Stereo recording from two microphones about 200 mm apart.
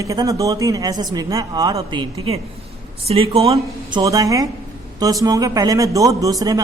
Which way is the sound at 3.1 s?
30° right (ahead or behind).